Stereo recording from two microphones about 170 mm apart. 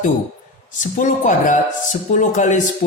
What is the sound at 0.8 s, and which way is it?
Speech, 50° left (ahead or behind).